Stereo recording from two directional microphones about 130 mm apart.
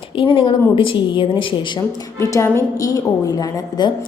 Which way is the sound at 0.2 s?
45° left (ahead or behind).